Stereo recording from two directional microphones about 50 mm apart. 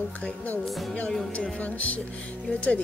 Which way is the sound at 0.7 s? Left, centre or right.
Centre.